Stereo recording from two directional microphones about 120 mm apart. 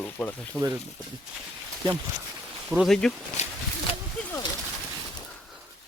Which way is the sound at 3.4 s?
70° left (ahead or behind).